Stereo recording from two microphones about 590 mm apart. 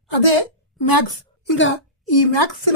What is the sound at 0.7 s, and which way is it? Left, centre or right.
Speech, left.